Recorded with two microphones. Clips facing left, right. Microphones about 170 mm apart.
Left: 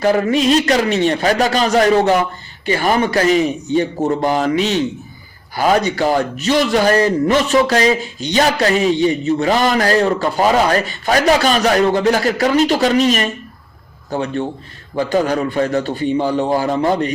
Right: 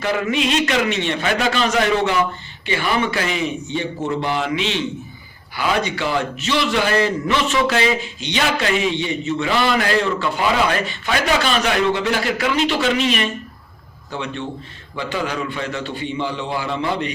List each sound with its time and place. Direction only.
0.0 s a man's voice: 40° left (ahead or behind)